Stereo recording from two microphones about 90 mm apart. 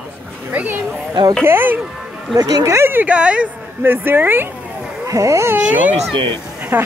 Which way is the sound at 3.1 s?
10° right (ahead or behind).